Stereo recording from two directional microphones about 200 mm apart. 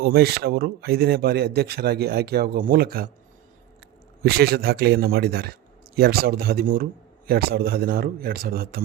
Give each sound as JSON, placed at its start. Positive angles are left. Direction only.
{"t": 0.0, "sound": "speech", "side_deg": -50}
{"t": 4.2, "sound": "speech", "side_deg": -50}